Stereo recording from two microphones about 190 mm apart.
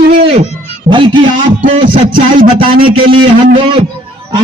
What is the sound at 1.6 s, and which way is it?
Music, 45° right (ahead or behind).